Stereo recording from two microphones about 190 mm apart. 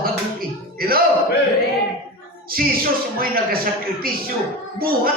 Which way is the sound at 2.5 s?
50° right (ahead or behind).